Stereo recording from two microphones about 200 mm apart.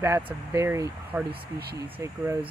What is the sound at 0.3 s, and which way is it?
Speech, 15° right (ahead or behind).